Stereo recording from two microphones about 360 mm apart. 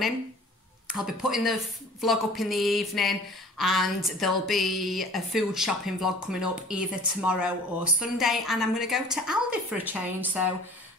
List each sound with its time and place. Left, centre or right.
0.9 s speech: centre